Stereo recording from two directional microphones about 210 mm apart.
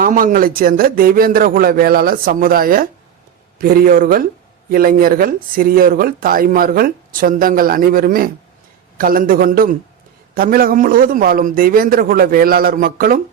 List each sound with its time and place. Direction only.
0.0 s a man's voice: 40° right (ahead or behind)